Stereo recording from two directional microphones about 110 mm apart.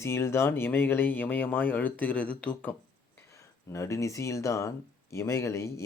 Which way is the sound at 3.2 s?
25° left (ahead or behind).